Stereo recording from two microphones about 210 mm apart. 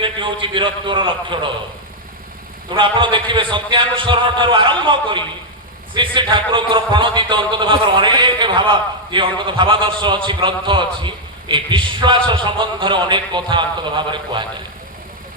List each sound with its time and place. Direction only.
0.0 s a man's voice: 25° right (ahead or behind)
2.6 s a man's voice: 20° right (ahead or behind)